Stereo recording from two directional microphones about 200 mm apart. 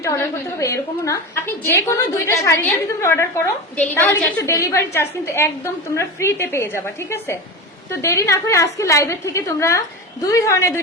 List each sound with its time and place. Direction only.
0.6 s a woman's voice: 15° left (ahead or behind)